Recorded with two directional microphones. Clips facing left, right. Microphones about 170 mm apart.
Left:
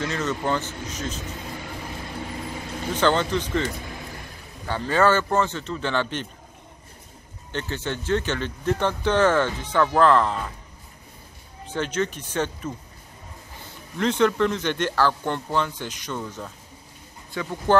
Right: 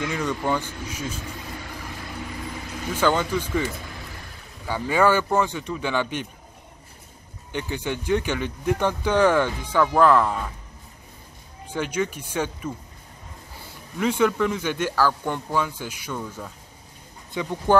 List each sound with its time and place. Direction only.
0.0 s speech: 10° right (ahead or behind)
2.9 s speech: 10° right (ahead or behind)
7.5 s speech: 15° right (ahead or behind)
11.6 s speech: 10° right (ahead or behind)
13.9 s speech: 10° right (ahead or behind)